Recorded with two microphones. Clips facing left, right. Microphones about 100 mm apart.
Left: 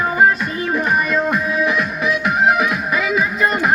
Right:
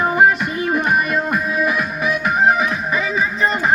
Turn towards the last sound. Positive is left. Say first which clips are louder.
# left 1 dB
turn(degrees=5)  # may be behind; listen again after turning